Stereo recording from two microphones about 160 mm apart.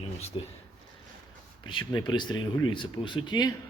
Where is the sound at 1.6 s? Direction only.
30° left (ahead or behind).